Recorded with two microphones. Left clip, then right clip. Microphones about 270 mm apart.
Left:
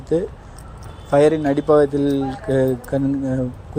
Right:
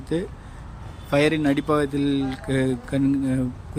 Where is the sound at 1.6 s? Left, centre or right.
Centre.